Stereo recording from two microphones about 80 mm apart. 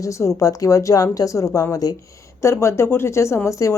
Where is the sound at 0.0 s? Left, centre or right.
Left.